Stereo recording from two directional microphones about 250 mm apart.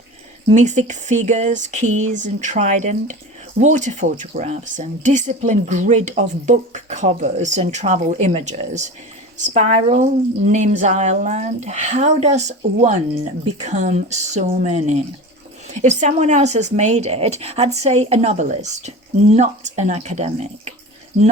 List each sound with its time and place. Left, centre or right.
0.5 s speech: right